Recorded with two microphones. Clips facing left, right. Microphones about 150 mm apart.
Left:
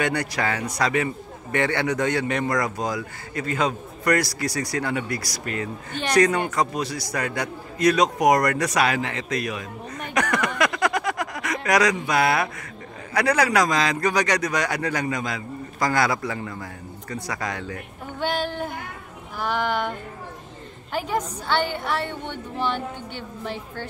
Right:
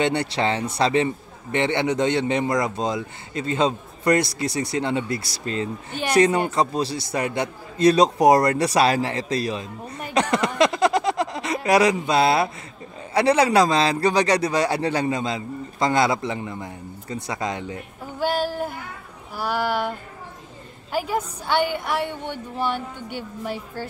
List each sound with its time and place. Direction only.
0.0 s a man's voice: 25° right (ahead or behind)
18.2 s speech: 5° right (ahead or behind)